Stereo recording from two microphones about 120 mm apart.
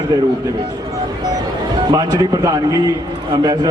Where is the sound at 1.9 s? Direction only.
35° right (ahead or behind).